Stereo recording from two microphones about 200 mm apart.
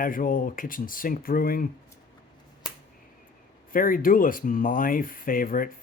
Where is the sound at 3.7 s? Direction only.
45° left (ahead or behind).